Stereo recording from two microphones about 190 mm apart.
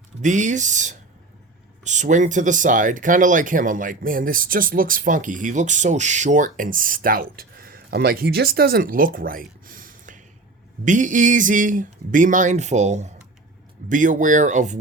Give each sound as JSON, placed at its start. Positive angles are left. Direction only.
{"t": 0.2, "sound": "speech", "side_deg": -40}